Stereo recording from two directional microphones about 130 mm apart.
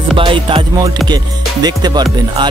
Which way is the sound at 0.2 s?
40° right (ahead or behind).